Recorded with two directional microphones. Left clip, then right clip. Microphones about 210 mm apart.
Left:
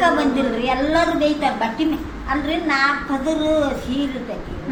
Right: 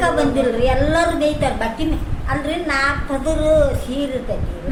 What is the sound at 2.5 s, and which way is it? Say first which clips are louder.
Speech: even; 25° right (ahead or behind).